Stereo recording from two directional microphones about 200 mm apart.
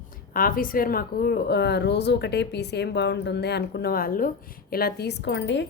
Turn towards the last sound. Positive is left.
turn(degrees=60)  # may be behind; listen again after turning